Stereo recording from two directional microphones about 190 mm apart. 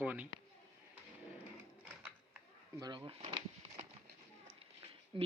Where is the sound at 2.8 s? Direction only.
25° right (ahead or behind).